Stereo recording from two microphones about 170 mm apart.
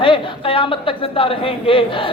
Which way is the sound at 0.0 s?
30° left (ahead or behind).